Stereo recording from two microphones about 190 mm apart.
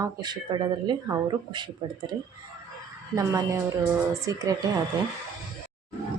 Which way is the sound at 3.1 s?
15° right (ahead or behind).